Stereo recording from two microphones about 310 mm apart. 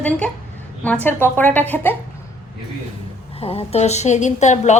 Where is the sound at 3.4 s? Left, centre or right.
Centre.